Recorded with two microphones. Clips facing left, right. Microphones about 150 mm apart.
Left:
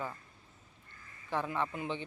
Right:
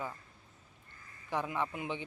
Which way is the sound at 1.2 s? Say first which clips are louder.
Left 1 dB; 15° right (ahead or behind).